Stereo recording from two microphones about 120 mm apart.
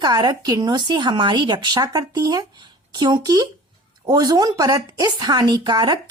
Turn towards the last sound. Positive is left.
turn(degrees=-35)  # may be behind; listen again after turning